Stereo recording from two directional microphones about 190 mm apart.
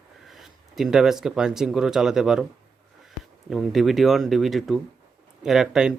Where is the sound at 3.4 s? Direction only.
Centre (ahead or behind).